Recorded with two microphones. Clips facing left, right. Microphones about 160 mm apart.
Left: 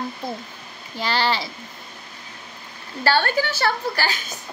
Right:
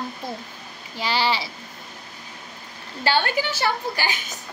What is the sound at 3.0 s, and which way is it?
Speech, 15° right (ahead or behind).